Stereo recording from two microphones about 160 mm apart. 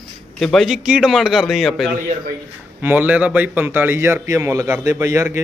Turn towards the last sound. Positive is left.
turn(degrees=-20)  # may be behind; listen again after turning